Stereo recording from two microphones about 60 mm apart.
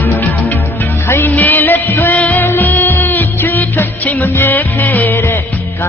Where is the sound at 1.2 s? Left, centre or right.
Left.